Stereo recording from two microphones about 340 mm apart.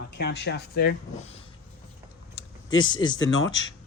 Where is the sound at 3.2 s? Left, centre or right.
Left.